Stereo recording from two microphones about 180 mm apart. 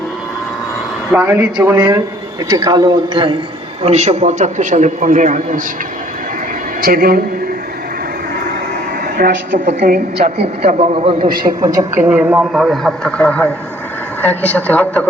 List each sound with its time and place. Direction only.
1.1 s speech: 10° right (ahead or behind)
1.7 s a man's voice: 25° right (ahead or behind)
3.8 s a man's voice: 40° right (ahead or behind)
6.8 s a man's voice: 55° right (ahead or behind)
9.1 s a woman's voice: 50° right (ahead or behind); by 11.3 s 30° right (ahead or behind)
11.4 s a man's voice: 20° right (ahead or behind)
12.0 s a man's voice: 10° right (ahead or behind); by 15.0 s 10° left (ahead or behind)